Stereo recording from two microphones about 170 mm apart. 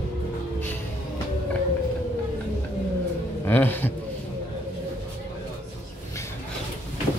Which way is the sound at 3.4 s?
10° left (ahead or behind).